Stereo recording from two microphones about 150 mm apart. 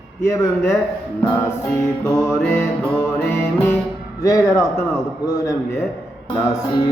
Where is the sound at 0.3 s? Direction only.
20° left (ahead or behind).